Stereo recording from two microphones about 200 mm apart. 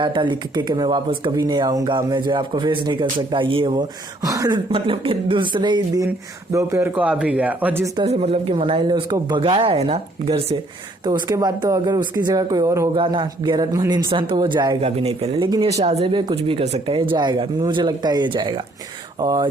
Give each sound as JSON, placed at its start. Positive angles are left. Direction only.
{"t": 0.0, "sound": "a man's voice", "side_deg": -25}
{"t": 7.9, "sound": "speech", "side_deg": -30}